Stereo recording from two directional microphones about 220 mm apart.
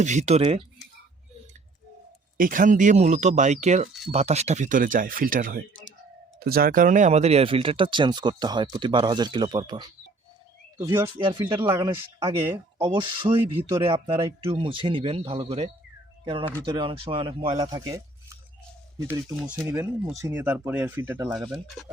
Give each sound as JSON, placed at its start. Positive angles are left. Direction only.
{"t": 0.0, "sound": "speech", "side_deg": -30}
{"t": 2.4, "sound": "speech", "side_deg": -40}
{"t": 19.0, "sound": "speech", "side_deg": -10}
{"t": 21.3, "sound": "speech", "side_deg": 0}